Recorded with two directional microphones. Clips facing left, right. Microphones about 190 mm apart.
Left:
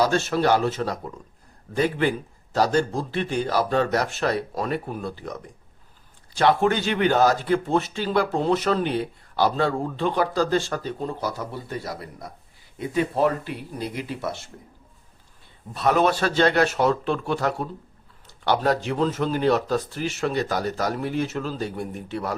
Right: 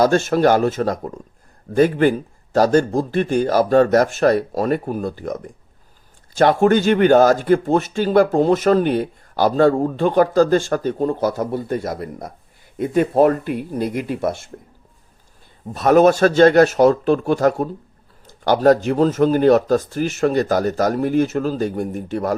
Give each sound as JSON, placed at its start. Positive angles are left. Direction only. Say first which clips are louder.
{"t": 0.0, "sound": "speech", "louder": "right 6 dB", "side_deg": -50}
{"t": 15.7, "sound": "speech", "louder": "right 8 dB", "side_deg": -45}